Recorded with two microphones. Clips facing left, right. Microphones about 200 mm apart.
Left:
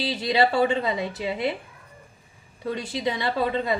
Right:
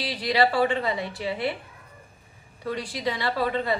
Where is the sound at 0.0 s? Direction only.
25° left (ahead or behind).